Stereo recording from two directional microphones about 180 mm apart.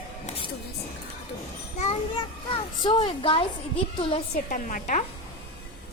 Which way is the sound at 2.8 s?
25° left (ahead or behind).